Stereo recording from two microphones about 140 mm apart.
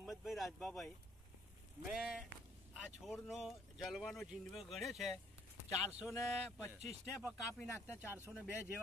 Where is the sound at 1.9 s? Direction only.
5° right (ahead or behind).